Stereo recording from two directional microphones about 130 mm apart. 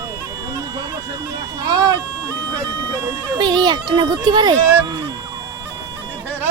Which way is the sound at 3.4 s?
35° right (ahead or behind).